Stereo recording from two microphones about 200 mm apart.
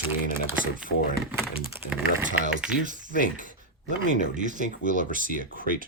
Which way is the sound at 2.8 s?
40° right (ahead or behind).